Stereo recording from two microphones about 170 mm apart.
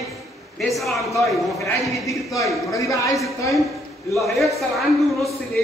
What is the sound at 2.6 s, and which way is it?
Speech, 20° left (ahead or behind).